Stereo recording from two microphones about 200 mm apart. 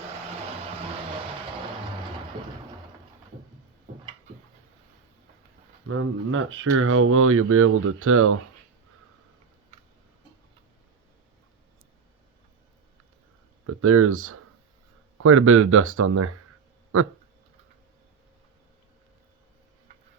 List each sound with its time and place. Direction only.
5.9 s speech: 85° right
13.7 s speech: 90° right